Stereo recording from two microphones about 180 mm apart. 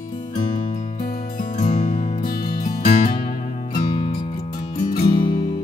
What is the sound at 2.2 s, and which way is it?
Music, 55° left (ahead or behind).